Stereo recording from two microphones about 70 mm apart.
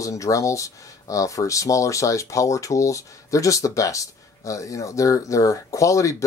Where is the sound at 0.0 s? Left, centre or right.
Left.